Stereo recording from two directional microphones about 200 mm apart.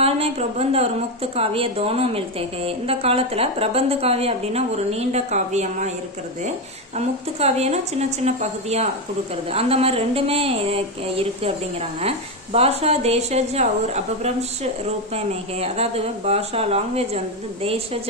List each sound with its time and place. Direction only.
0.0 s a woman's voice: 30° right (ahead or behind)
7.0 s a woman's voice: 30° right (ahead or behind)